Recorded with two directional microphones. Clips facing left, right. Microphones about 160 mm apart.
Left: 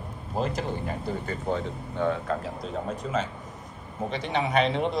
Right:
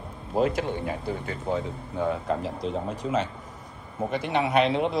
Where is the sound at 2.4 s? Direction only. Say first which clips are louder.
Right 2 dB; 75° right (ahead or behind).